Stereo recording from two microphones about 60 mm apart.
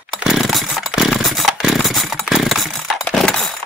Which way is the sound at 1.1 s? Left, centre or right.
Centre.